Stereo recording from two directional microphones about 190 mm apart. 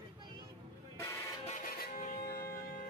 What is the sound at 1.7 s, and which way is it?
Music, 50° left (ahead or behind).